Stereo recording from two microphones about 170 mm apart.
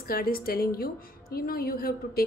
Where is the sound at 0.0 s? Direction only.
60° left (ahead or behind).